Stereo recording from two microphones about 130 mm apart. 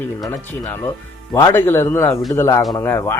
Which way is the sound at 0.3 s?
15° left (ahead or behind).